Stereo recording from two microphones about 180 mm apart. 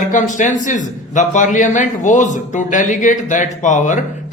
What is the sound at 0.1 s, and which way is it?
Speech, 45° left (ahead or behind).